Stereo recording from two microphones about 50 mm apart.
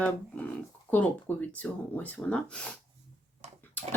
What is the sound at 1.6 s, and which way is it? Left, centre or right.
Speech, left.